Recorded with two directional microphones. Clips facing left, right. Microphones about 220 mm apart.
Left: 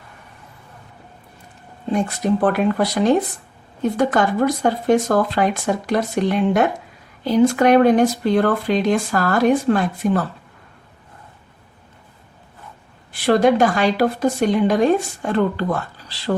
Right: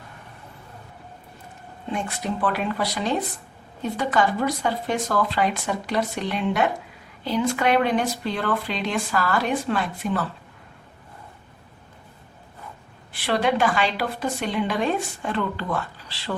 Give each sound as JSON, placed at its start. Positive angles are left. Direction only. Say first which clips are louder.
{"t": 1.9, "sound": "speech", "louder": "left 9 dB", "side_deg": 40}
{"t": 13.2, "sound": "speech", "louder": "left 7 dB", "side_deg": 45}